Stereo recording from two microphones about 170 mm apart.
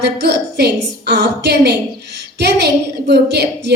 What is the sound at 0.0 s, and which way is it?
A woman's voice, 75° right (ahead or behind).